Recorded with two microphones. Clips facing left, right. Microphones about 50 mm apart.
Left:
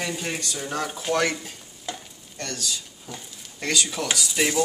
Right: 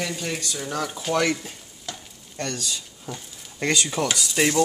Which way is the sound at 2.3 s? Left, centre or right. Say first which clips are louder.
Right 2 dB; right.